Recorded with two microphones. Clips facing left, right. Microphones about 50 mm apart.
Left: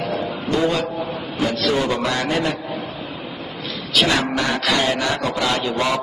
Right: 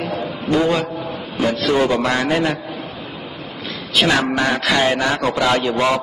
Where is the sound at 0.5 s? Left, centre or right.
Right.